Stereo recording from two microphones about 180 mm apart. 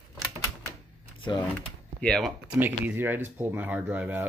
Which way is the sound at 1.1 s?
25° left (ahead or behind).